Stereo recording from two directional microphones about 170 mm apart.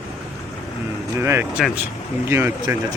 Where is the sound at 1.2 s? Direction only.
15° right (ahead or behind).